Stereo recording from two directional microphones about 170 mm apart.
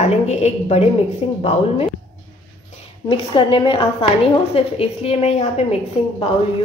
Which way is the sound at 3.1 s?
30° left (ahead or behind).